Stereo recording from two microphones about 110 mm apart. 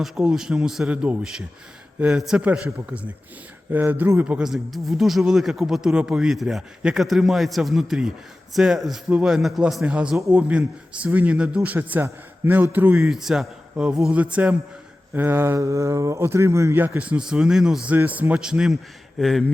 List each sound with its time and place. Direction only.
0.0 s a man's voice: 5° right (ahead or behind)